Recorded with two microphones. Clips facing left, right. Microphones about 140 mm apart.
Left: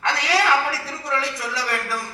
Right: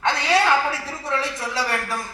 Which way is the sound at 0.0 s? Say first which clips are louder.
Right 2 dB; 25° right (ahead or behind).